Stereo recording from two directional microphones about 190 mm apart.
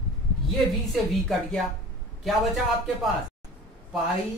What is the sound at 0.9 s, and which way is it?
Speech, centre (ahead or behind).